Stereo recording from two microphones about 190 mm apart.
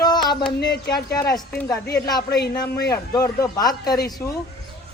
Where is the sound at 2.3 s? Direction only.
60° left (ahead or behind).